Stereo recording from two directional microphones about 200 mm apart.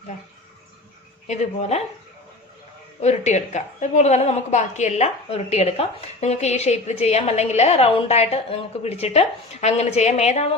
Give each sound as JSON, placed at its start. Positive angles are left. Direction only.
{"t": 1.3, "sound": "a woman's voice", "side_deg": 35}
{"t": 3.0, "sound": "a woman's voice", "side_deg": 35}